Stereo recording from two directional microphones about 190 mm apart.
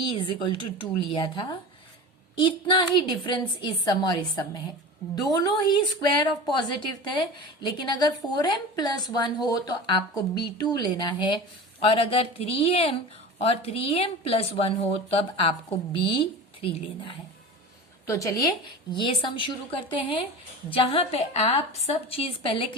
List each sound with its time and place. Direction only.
0.0 s a woman's voice: 25° left (ahead or behind)
5.6 s a woman's voice: 25° left (ahead or behind)
18.0 s a woman's voice: 15° left (ahead or behind)